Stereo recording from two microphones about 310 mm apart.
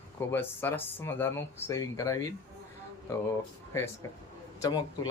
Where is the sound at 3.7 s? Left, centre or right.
Centre.